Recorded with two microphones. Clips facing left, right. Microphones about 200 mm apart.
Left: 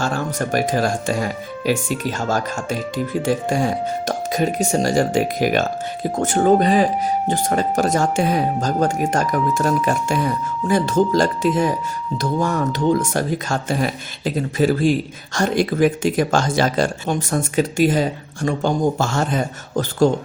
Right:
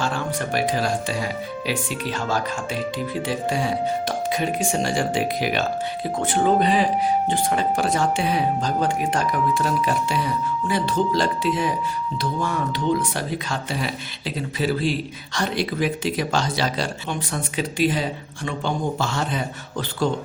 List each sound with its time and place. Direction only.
0.0 s speech: 45° left (ahead or behind)